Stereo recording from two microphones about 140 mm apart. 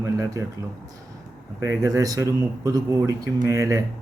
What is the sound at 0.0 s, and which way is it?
Speech, 20° right (ahead or behind).